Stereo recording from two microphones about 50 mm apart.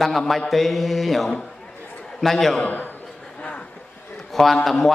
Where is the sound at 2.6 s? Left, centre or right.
Left.